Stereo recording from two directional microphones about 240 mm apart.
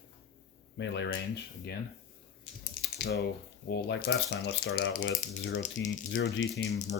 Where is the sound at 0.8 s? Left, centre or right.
Left.